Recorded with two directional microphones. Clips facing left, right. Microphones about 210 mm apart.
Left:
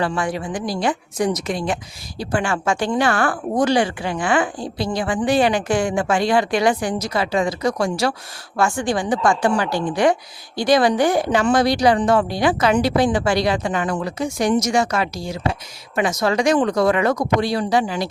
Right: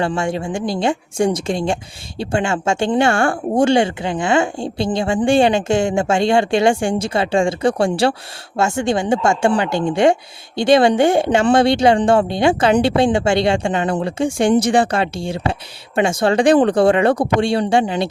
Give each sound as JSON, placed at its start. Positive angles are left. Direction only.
{"t": 0.0, "sound": "speech", "side_deg": -25}